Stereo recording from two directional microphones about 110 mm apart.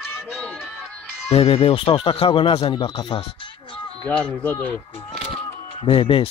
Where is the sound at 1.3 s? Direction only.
60° left (ahead or behind).